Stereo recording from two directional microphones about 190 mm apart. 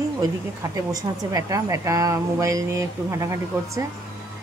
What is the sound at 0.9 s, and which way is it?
A woman's voice, 15° right (ahead or behind).